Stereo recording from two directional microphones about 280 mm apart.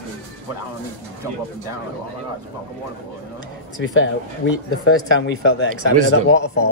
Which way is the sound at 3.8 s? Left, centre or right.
Left.